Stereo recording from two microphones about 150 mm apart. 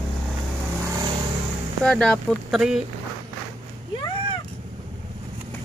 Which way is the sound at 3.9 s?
30° left (ahead or behind).